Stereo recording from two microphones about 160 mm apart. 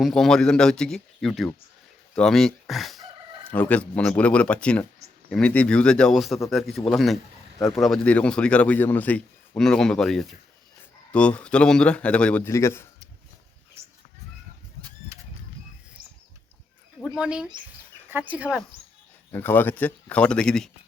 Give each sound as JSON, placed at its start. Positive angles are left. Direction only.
{"t": 0.0, "sound": "speech", "side_deg": 5}
{"t": 17.2, "sound": "speech", "side_deg": -5}
{"t": 19.3, "sound": "speech", "side_deg": 15}